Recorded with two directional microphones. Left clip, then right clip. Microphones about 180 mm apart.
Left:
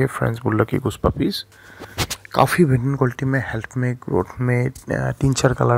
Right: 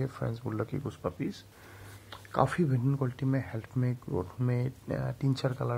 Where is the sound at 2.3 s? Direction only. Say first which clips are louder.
Left 12 dB; 20° left (ahead or behind).